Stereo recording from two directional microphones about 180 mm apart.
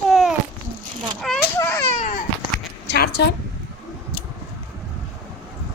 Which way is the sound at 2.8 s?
65° left (ahead or behind).